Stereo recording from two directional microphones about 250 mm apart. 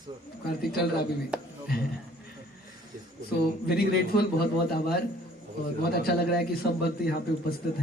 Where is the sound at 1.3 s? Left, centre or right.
Centre.